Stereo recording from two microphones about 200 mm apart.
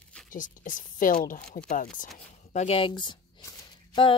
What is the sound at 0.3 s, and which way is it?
Speech, 40° left (ahead or behind).